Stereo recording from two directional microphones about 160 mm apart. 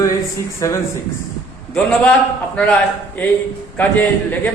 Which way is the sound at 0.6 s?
20° left (ahead or behind).